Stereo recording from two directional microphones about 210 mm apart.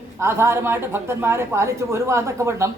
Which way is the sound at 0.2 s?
10° right (ahead or behind).